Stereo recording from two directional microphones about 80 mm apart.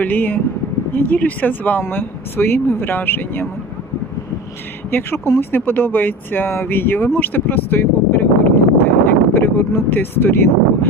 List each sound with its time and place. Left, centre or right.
0.0 s speech: left
4.9 s speech: left
7.2 s a sound: left